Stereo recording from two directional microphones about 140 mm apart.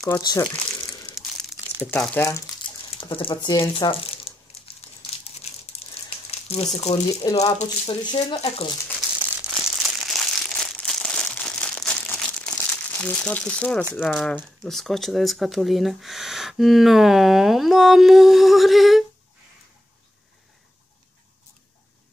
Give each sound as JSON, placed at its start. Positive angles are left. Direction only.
{"t": 0.0, "sound": "speech", "side_deg": 25}
{"t": 1.1, "sound": "crumpling", "side_deg": 0}
{"t": 1.9, "sound": "speech", "side_deg": 15}
{"t": 2.6, "sound": "a sound", "side_deg": 40}
{"t": 6.0, "sound": "crumpling", "side_deg": 45}
{"t": 7.2, "sound": "speech", "side_deg": 30}
{"t": 8.4, "sound": "speech", "side_deg": 45}
{"t": 9.4, "sound": "crumpling", "side_deg": -5}
{"t": 14.0, "sound": "speech", "side_deg": 0}